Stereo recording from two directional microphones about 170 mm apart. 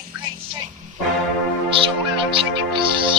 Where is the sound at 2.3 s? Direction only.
30° right (ahead or behind).